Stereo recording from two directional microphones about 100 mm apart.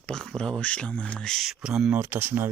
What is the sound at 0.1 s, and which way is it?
Speech, 5° left (ahead or behind).